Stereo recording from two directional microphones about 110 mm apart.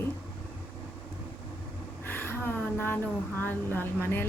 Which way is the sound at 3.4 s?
20° left (ahead or behind).